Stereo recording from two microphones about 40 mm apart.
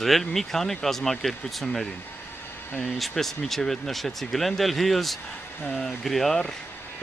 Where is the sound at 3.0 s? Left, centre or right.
Centre.